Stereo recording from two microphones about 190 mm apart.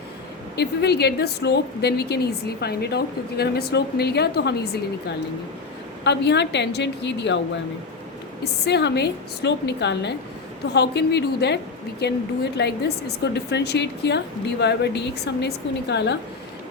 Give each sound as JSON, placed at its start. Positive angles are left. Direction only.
{"t": 0.5, "sound": "a woman's voice", "side_deg": 60}
{"t": 8.6, "sound": "a woman's voice", "side_deg": 60}